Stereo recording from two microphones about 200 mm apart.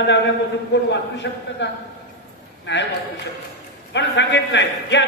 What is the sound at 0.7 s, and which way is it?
Speech, 60° left (ahead or behind).